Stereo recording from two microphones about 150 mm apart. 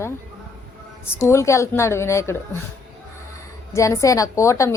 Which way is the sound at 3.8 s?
20° left (ahead or behind).